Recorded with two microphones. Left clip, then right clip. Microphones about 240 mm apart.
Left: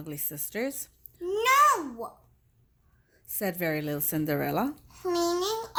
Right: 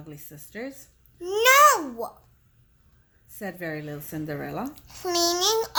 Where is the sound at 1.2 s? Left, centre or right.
Right.